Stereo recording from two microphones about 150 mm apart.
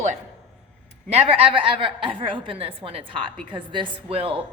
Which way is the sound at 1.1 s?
40° right (ahead or behind).